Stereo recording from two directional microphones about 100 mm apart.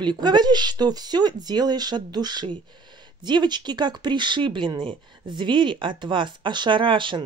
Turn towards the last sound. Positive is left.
turn(degrees=-55)  # may be behind; listen again after turning